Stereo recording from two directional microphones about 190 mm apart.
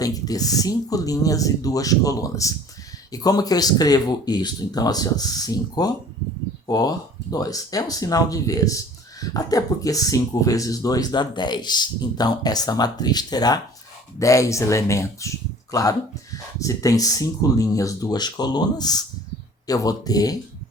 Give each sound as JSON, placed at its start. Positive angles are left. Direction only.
{"t": 0.0, "sound": "speech", "side_deg": 20}